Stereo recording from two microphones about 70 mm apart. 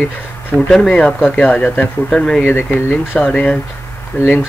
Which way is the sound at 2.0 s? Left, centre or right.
Centre.